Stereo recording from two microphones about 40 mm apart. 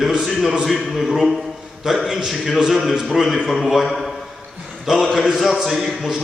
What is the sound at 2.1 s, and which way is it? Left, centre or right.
Speech, centre.